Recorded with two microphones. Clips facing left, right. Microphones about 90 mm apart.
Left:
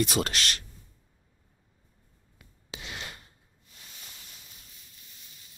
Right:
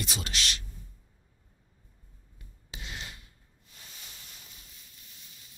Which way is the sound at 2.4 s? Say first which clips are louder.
Left 3 dB; 90° left.